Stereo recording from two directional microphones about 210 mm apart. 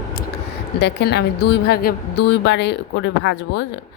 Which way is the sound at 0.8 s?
55° left (ahead or behind).